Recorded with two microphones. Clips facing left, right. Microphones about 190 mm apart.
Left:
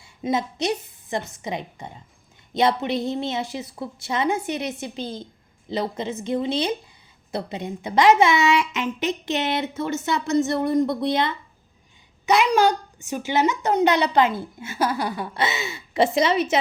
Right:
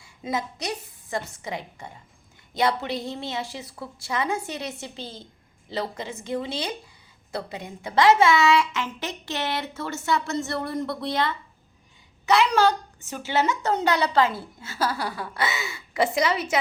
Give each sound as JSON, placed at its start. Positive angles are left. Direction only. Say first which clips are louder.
{"t": 0.0, "sound": "a woman's voice", "louder": "left 5 dB", "side_deg": 25}